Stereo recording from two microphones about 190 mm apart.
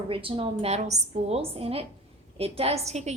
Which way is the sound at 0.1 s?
30° right (ahead or behind).